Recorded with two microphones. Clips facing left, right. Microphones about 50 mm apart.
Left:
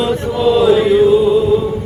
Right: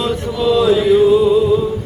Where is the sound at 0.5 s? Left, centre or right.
Centre.